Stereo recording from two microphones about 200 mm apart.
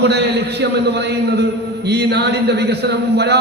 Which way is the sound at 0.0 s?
55° right (ahead or behind).